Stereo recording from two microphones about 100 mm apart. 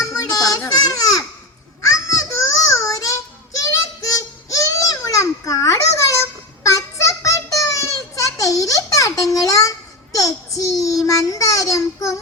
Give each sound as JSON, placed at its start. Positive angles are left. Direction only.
{"t": 0.0, "sound": "children playing", "side_deg": 35}
{"t": 0.7, "sound": "babbling", "side_deg": 35}
{"t": 1.8, "sound": "child singing", "side_deg": 35}
{"t": 3.6, "sound": "a sound", "side_deg": 35}